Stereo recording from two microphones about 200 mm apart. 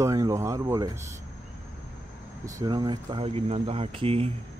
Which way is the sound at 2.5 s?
20° right (ahead or behind).